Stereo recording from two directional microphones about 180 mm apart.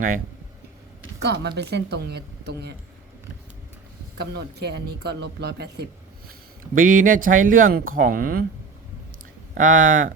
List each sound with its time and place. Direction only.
1.2 s a woman's voice: 70° right (ahead or behind)
4.2 s speech: 65° right (ahead or behind)
6.7 s speech: 50° right (ahead or behind)
9.6 s speech: 45° right (ahead or behind)